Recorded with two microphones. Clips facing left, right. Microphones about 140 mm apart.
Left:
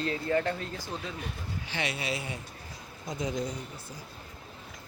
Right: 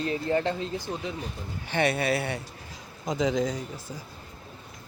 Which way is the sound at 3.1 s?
90° right.